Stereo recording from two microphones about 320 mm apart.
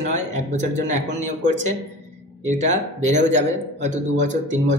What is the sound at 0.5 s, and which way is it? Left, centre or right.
Speech, right.